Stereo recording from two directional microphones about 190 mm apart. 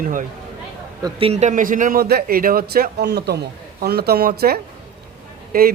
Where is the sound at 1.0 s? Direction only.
25° right (ahead or behind); by 5.7 s 50° right (ahead or behind).